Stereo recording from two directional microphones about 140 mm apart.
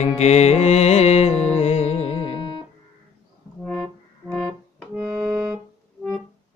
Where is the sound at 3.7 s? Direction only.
5° left (ahead or behind).